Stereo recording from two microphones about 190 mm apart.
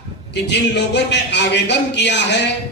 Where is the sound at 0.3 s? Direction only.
65° left (ahead or behind).